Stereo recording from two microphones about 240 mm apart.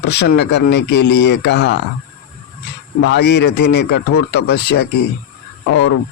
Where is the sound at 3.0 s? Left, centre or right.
Left.